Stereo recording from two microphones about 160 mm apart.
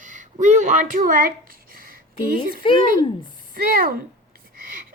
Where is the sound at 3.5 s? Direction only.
65° right (ahead or behind).